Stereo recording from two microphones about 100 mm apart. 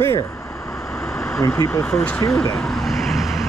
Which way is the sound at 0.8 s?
5° left (ahead or behind).